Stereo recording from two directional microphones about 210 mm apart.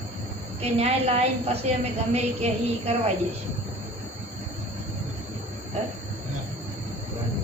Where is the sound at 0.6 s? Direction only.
30° right (ahead or behind).